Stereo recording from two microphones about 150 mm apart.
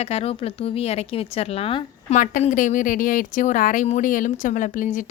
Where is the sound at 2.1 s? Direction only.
55° left (ahead or behind).